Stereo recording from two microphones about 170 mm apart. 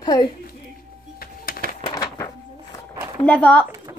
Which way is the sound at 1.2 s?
60° left (ahead or behind).